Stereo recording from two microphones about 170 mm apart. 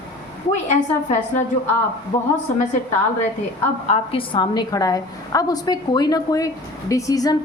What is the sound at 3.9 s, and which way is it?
A woman's voice, 30° left (ahead or behind).